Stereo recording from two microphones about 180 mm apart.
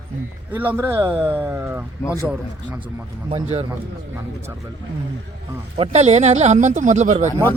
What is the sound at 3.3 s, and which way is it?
Speech, 35° right (ahead or behind).